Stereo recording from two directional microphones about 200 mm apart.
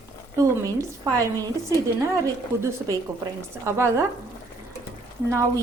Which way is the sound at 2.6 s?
15° right (ahead or behind).